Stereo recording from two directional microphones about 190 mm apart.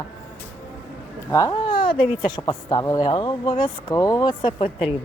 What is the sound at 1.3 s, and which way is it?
Speech, 20° left (ahead or behind).